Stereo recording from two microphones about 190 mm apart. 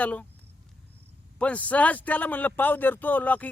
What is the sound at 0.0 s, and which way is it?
Speech, 5° left (ahead or behind).